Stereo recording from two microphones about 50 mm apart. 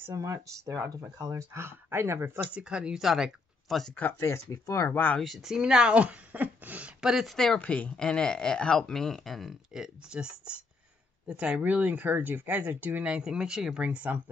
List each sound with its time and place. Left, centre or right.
0.2 s speech: right
1.6 s speech: right
2.5 s speech: centre
3.6 s speech: centre
4.2 s speech: left
4.8 s speech: left
5.2 s speech: centre; by 6.9 s right
7.0 s speech: centre
7.5 s speech: left; by 9.6 s centre
9.8 s speech: centre
11.6 s speech: right
13.0 s speech: centre
13.8 s speech: right